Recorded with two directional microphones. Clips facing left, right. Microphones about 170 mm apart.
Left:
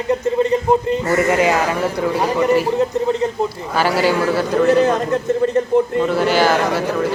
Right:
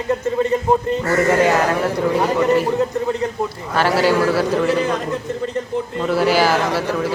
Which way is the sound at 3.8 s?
Centre (ahead or behind).